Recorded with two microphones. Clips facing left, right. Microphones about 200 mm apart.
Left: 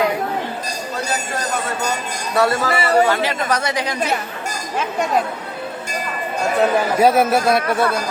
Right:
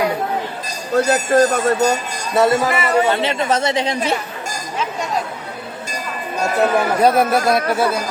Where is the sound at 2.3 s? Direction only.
20° right (ahead or behind).